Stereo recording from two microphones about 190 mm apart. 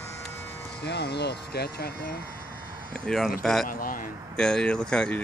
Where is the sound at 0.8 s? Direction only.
65° left (ahead or behind).